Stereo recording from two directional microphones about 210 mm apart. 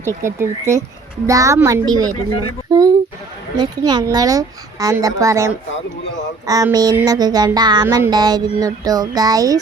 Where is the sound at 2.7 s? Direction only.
20° right (ahead or behind).